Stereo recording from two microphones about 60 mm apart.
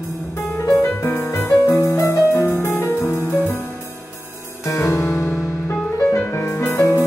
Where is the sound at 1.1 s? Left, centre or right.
Left.